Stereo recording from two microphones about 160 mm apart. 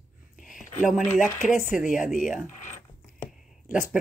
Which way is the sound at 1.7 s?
5° right (ahead or behind).